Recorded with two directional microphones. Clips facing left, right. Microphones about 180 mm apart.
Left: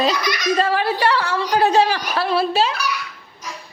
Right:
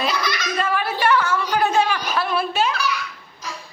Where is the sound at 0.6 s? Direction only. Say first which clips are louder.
Left 1 dB; 35° left (ahead or behind).